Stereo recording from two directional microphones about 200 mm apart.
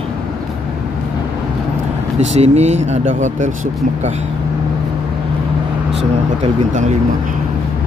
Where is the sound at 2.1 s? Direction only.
35° right (ahead or behind).